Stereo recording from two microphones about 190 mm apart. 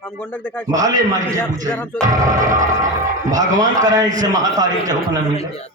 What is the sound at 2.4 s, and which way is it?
A man's voice, 40° right (ahead or behind).